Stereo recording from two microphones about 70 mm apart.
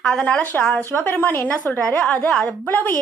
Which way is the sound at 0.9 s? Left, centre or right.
Left.